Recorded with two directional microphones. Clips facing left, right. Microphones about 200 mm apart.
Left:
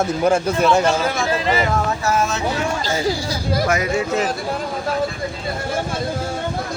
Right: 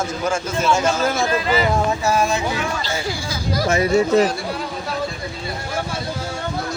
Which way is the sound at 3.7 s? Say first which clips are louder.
Right 8 dB; 35° right (ahead or behind).